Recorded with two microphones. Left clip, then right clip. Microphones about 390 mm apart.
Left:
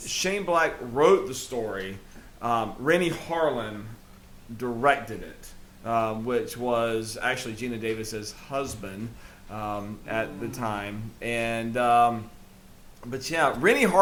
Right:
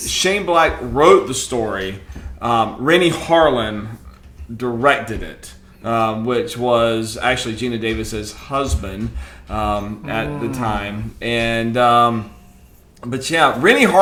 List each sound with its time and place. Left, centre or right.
0.2 s speech: left
4.5 s speech: left